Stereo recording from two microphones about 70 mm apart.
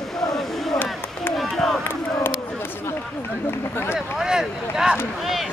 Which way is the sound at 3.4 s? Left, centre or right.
Left.